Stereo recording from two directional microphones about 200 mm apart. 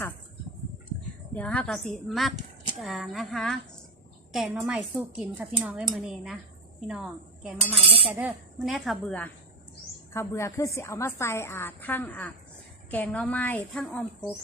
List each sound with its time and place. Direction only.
1.3 s speech: 5° left (ahead or behind)
7.6 s cutlery: 30° right (ahead or behind)
8.1 s a woman's voice: 5° right (ahead or behind)